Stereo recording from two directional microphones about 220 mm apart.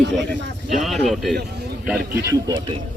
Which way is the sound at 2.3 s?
15° right (ahead or behind).